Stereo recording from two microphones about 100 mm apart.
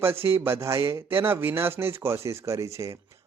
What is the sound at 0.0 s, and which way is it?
A man's voice, 25° right (ahead or behind).